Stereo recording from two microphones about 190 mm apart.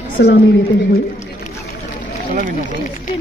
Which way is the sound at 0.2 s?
65° left (ahead or behind).